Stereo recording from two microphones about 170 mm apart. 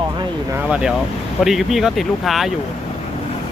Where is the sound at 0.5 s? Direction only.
5° right (ahead or behind).